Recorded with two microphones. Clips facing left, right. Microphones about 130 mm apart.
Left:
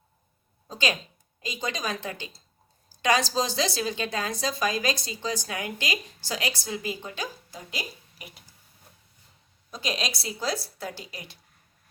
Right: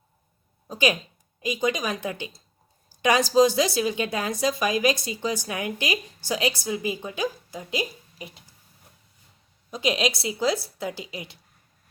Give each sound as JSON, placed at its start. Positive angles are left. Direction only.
{"t": 0.7, "sound": "a woman's voice", "side_deg": -15}
{"t": 9.7, "sound": "a woman's voice", "side_deg": -20}